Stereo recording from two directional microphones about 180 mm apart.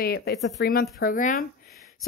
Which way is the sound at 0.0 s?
60° left (ahead or behind).